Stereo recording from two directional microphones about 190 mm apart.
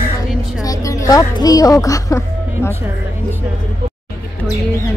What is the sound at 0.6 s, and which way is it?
A woman's voice, 20° left (ahead or behind).